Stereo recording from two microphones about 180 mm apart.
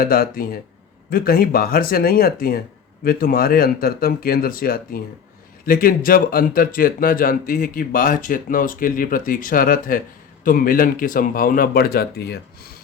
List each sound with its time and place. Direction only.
0.0 s speech: 55° left (ahead or behind)